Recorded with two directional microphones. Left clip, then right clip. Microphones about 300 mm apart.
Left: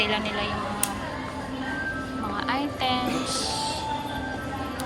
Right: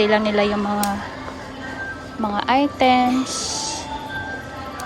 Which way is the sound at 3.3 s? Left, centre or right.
Right.